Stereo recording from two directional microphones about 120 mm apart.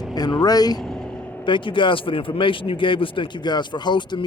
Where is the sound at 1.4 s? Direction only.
45° left (ahead or behind).